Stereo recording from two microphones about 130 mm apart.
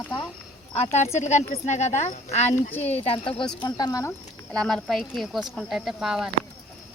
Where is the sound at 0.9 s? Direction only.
60° left (ahead or behind); by 3.4 s 45° left (ahead or behind).